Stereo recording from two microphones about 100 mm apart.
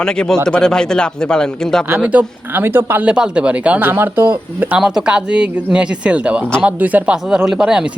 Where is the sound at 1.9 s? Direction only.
15° right (ahead or behind).